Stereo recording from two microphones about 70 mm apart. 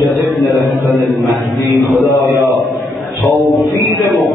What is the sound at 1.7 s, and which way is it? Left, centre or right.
Mantra, centre.